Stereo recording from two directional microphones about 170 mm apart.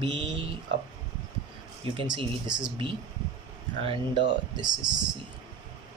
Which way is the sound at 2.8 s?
30° right (ahead or behind).